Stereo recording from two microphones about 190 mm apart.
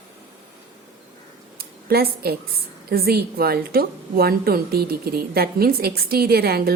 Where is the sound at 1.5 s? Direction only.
55° right (ahead or behind).